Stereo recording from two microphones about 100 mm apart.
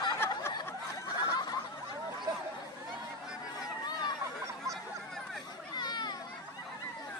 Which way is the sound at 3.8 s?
45° left (ahead or behind).